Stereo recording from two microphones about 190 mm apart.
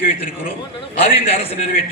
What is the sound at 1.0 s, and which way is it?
Speech, 30° left (ahead or behind).